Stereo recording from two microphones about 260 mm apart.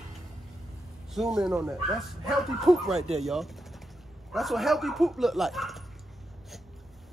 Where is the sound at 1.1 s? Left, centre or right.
Centre.